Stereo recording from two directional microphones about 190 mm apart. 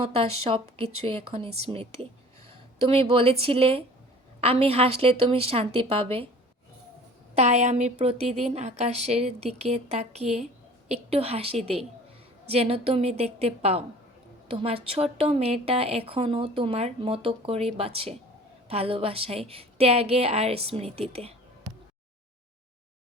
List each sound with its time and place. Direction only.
0.1 s a woman's voice: 30° right (ahead or behind)
7.3 s a woman's voice: 35° right (ahead or behind)